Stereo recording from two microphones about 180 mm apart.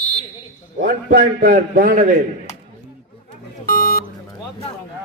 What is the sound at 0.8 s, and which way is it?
A man's voice, 50° right (ahead or behind).